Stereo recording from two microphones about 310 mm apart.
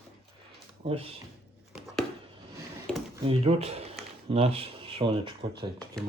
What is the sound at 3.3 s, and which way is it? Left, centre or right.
Speech, centre.